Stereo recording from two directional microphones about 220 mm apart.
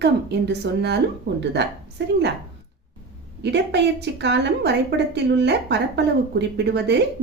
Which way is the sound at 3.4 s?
50° right (ahead or behind).